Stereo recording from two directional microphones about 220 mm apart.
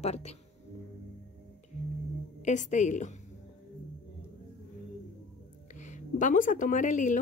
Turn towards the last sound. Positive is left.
turn(degrees=35)  # may be behind; listen again after turning